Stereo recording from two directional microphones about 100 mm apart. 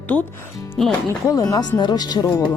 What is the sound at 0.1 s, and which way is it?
Speech, 15° left (ahead or behind).